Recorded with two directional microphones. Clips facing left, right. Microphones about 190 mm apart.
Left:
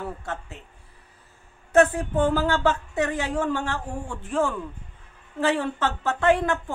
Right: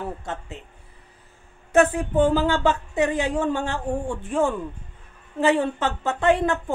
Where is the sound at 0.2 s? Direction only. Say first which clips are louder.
Right 1 dB; 20° right (ahead or behind).